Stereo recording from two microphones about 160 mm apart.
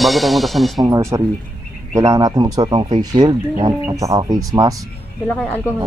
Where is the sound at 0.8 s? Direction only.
20° right (ahead or behind).